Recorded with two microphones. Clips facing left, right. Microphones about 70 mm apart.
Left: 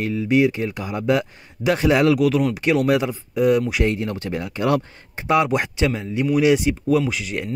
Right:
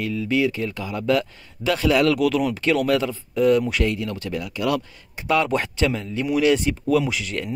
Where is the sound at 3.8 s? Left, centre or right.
Left.